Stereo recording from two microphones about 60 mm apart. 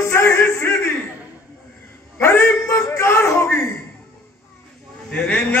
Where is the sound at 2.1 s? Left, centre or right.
Left.